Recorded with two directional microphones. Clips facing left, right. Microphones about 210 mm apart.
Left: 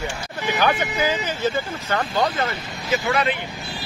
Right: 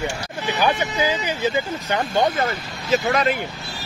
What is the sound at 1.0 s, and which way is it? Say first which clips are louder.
Speech: right 1 dB; 10° right (ahead or behind).